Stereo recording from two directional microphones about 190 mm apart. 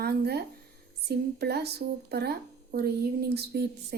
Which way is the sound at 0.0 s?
55° right (ahead or behind).